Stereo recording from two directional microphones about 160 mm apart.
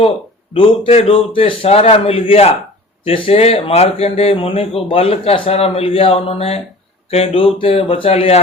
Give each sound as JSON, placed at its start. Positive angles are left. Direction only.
{"t": 0.5, "sound": "a man's voice", "side_deg": 35}